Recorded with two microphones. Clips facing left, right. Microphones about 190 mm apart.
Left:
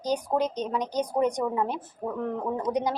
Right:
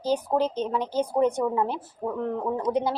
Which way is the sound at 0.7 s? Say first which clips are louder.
Right 2 dB; 15° left (ahead or behind).